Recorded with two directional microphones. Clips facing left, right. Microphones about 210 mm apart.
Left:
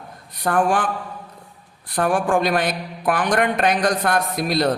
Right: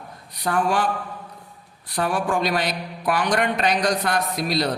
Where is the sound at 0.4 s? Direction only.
50° left (ahead or behind).